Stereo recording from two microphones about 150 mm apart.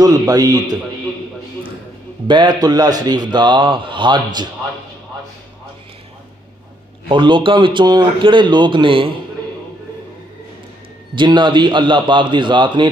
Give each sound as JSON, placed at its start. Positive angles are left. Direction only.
{"t": 0.0, "sound": "a man's voice", "side_deg": -25}
{"t": 2.2, "sound": "a man's voice", "side_deg": -30}
{"t": 7.1, "sound": "speech", "side_deg": -35}
{"t": 11.1, "sound": "speech", "side_deg": -30}